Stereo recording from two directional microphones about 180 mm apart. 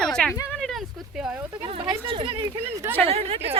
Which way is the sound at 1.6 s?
30° right (ahead or behind).